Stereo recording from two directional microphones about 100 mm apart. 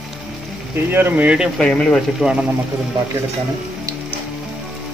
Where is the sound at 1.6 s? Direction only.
10° left (ahead or behind).